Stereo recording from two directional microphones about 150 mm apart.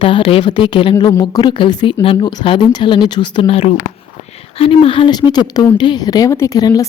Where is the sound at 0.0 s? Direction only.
35° left (ahead or behind).